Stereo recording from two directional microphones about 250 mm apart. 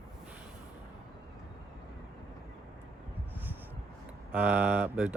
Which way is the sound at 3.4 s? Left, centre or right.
Centre.